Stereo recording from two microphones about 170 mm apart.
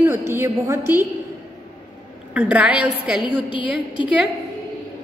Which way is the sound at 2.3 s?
5° right (ahead or behind).